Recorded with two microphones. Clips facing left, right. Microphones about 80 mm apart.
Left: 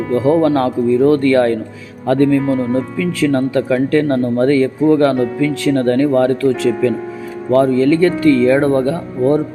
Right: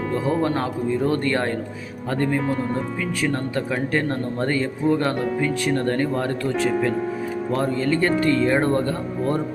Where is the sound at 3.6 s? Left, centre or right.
Left.